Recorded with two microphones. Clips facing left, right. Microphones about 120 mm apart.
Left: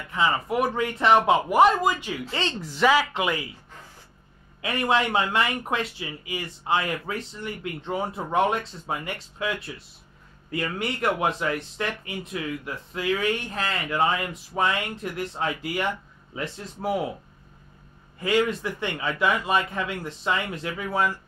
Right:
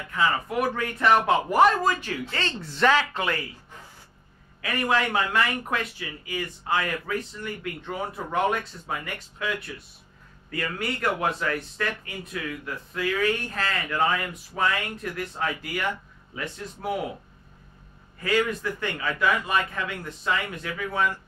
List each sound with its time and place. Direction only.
0.1 s speech: 20° left (ahead or behind)
4.6 s speech: 20° left (ahead or behind)
18.2 s speech: 25° left (ahead or behind)